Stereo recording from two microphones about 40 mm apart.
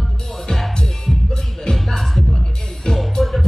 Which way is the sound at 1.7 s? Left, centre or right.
Centre.